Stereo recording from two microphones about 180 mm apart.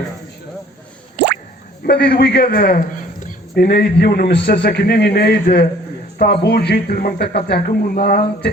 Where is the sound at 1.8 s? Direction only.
60° left (ahead or behind).